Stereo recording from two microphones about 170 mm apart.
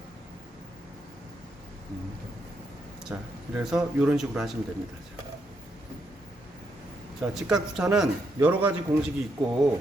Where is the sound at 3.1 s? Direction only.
10° right (ahead or behind).